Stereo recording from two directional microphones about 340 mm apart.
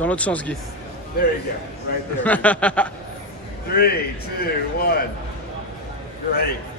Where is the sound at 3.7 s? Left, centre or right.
Left.